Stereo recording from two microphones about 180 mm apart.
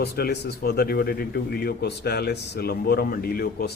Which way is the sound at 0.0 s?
65° left (ahead or behind).